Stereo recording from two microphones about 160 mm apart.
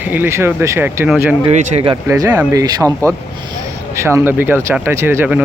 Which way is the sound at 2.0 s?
15° right (ahead or behind).